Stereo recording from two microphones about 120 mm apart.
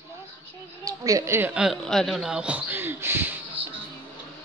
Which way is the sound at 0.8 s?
30° right (ahead or behind).